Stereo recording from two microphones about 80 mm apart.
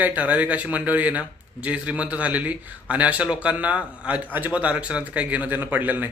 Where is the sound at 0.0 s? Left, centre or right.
Centre.